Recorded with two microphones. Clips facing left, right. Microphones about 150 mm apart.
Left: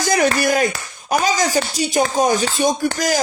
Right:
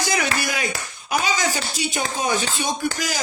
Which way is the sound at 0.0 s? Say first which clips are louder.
Left 7 dB; 45° left (ahead or behind).